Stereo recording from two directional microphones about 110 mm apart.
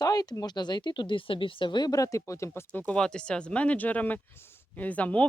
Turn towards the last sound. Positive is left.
turn(degrees=10)  # may be behind; listen again after turning